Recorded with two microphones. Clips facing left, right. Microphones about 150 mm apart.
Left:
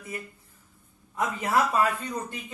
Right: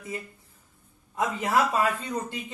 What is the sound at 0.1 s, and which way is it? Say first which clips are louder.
A man's voice: right 1 dB; 25° right (ahead or behind).